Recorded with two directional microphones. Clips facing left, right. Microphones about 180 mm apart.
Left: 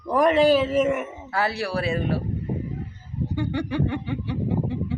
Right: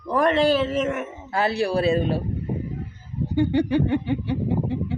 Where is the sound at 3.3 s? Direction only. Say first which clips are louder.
Right 7 dB; 25° right (ahead or behind).